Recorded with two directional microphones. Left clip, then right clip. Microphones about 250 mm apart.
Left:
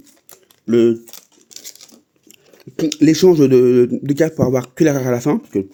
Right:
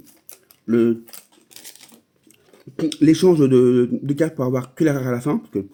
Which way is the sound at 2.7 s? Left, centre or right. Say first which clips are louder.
Left 2 dB; left.